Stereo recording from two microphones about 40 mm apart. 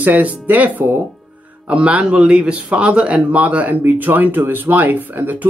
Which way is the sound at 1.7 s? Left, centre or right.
Right.